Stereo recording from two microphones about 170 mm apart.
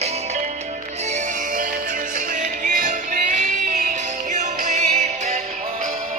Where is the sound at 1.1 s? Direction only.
50° right (ahead or behind).